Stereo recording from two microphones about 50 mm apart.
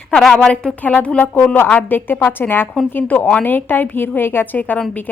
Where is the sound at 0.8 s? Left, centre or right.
Left.